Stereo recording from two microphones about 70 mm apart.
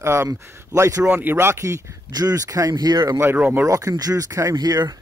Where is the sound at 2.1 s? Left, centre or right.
Right.